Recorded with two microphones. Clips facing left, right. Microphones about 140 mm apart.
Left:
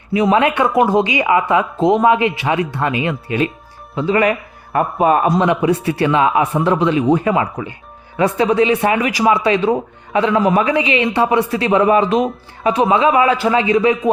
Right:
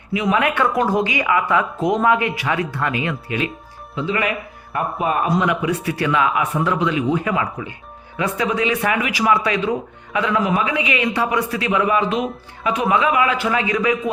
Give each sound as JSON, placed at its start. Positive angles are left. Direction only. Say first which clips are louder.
{"t": 0.1, "sound": "a man's voice", "louder": "left 5 dB", "side_deg": 35}
{"t": 0.5, "sound": "speech", "louder": "left 4 dB", "side_deg": 15}
{"t": 3.9, "sound": "a man's voice", "louder": "left 7 dB", "side_deg": 40}
{"t": 5.4, "sound": "a man's voice", "louder": "left 5 dB", "side_deg": 30}
{"t": 9.2, "sound": "a man's voice", "louder": "left 4 dB", "side_deg": 25}
{"t": 10.8, "sound": "speech", "louder": "left 5 dB", "side_deg": 30}